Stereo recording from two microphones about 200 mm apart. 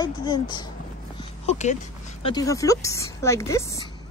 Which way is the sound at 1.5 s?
35° left (ahead or behind).